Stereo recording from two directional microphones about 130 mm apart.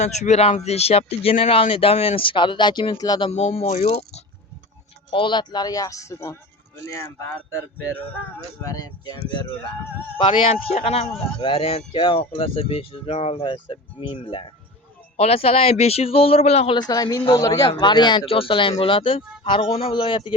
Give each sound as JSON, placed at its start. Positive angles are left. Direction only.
{"t": 0.0, "sound": "speech", "side_deg": 60}
{"t": 3.2, "sound": "speech", "side_deg": 55}
{"t": 5.1, "sound": "speech", "side_deg": 40}
{"t": 8.6, "sound": "speech", "side_deg": 30}
{"t": 10.5, "sound": "speech", "side_deg": 55}
{"t": 11.3, "sound": "speech", "side_deg": 40}
{"t": 16.7, "sound": "speech", "side_deg": 30}